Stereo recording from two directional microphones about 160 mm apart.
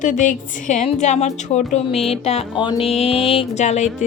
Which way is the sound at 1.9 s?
40° left (ahead or behind).